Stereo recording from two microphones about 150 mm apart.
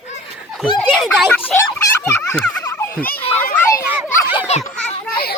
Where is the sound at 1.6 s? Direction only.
15° left (ahead or behind).